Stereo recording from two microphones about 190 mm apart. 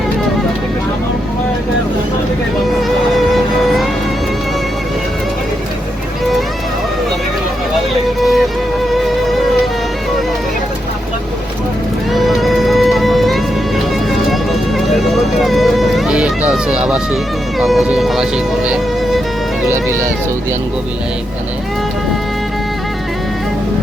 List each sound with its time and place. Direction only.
2.6 s music: centre (ahead or behind)
8.2 s music: centre (ahead or behind)
12.1 s music: centre (ahead or behind)
14.8 s music: centre (ahead or behind)